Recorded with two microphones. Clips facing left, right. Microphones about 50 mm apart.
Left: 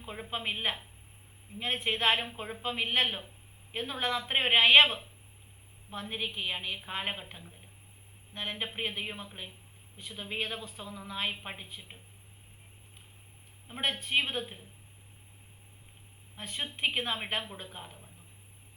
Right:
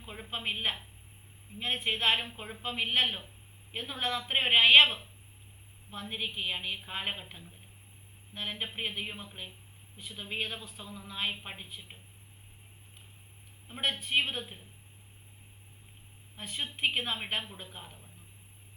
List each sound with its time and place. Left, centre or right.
0.0 s speech: centre
10.9 s a woman's voice: centre
13.7 s speech: centre
16.4 s speech: centre